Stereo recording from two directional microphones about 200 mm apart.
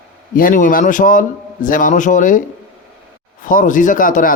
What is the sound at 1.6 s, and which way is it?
Speech, 40° left (ahead or behind).